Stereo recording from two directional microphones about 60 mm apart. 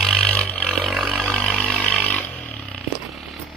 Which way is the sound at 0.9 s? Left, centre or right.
Centre.